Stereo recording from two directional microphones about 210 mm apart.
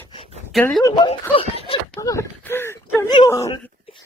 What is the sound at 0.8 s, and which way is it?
Speech, 20° left (ahead or behind).